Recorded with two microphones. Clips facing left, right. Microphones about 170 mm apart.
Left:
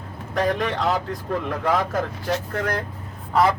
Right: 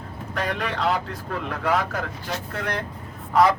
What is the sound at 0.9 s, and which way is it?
Speech, 35° left (ahead or behind).